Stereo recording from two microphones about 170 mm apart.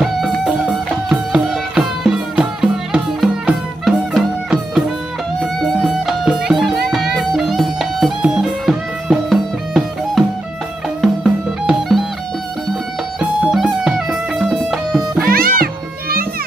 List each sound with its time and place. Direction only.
1.0 s music: 5° right (ahead or behind)
13.2 s music: 5° right (ahead or behind)
15.2 s music: 60° right (ahead or behind)